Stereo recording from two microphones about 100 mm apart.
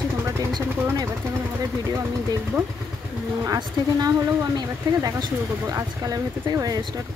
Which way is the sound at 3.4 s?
35° right (ahead or behind).